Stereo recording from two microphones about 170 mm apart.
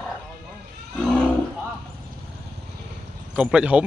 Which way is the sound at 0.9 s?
5° left (ahead or behind).